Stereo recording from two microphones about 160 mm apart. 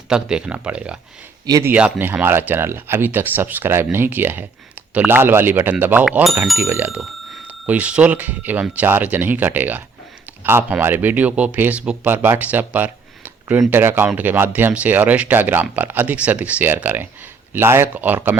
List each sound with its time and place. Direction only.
0.1 s speech: 5° right (ahead or behind)
1.5 s speech: 20° right (ahead or behind)
1.7 s speech: 10° right (ahead or behind)